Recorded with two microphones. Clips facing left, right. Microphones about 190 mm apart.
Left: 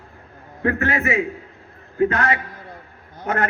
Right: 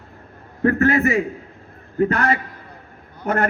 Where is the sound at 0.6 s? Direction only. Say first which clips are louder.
Right 5 dB; 40° right (ahead or behind).